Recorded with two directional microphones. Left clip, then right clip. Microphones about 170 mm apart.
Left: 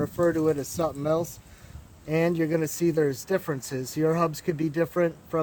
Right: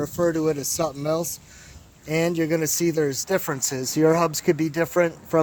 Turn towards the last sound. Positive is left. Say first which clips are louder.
# right 4 dB
turn(degrees=-55)  # may be behind; listen again after turning